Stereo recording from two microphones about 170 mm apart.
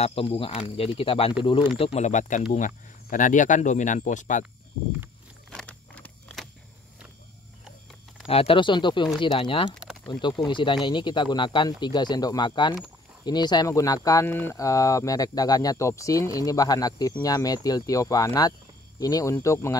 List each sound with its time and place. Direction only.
0.0 s speech: 35° left (ahead or behind)
5.5 s walk: 5° left (ahead or behind)
8.3 s speech: 35° left (ahead or behind); by 19.8 s 15° left (ahead or behind)